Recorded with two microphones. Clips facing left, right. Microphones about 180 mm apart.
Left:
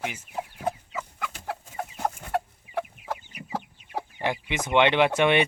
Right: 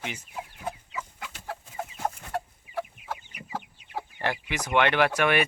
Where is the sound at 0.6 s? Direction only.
55° left (ahead or behind).